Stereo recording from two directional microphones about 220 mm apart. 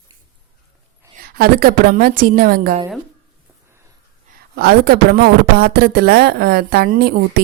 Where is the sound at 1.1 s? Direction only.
40° right (ahead or behind).